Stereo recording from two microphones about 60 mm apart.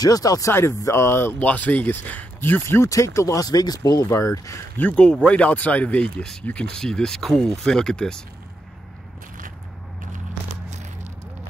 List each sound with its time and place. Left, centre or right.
0.0 s speech: left
0.5 s speech: left
1.4 s speech: left
2.8 s speech: left
3.3 s speech: left
4.0 s speech: left
4.7 s speech: left